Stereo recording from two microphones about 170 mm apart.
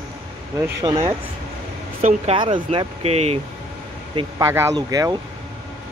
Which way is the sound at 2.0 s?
45° right (ahead or behind).